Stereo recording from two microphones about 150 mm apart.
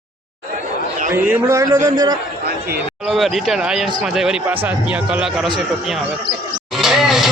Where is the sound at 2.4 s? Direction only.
90° right.